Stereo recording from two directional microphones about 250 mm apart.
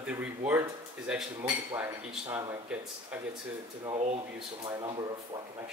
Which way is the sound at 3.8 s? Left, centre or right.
Right.